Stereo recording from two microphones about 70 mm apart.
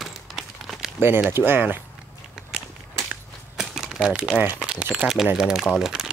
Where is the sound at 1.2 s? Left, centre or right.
Right.